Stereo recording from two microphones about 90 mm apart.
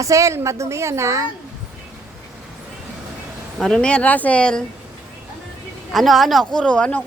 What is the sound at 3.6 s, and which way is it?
Speech, 10° left (ahead or behind).